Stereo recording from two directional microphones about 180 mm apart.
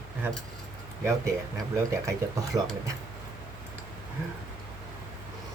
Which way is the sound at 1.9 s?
15° right (ahead or behind).